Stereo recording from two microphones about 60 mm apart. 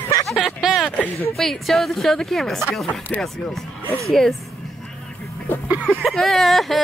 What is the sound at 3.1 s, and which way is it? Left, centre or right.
Speech, left.